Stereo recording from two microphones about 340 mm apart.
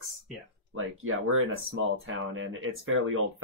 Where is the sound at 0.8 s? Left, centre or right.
Right.